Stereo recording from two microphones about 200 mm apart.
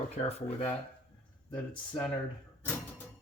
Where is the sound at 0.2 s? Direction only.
30° left (ahead or behind).